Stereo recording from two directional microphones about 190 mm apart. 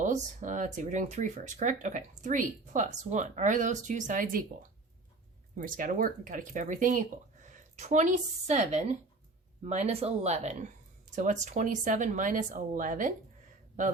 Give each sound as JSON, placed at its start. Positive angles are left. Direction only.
{"t": 0.0, "sound": "speech", "side_deg": -40}
{"t": 5.5, "sound": "speech", "side_deg": -45}